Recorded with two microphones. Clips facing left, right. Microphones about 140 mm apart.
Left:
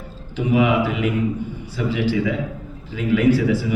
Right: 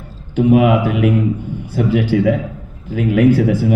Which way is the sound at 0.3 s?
50° right (ahead or behind).